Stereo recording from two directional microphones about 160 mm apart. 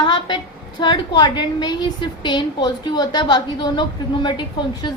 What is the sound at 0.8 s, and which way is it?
A woman's voice, 30° left (ahead or behind).